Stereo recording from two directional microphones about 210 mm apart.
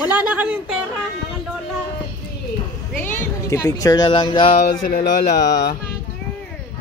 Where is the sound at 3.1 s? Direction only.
15° left (ahead or behind).